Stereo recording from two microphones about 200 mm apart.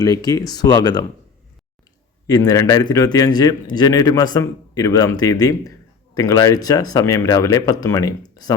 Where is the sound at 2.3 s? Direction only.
20° left (ahead or behind).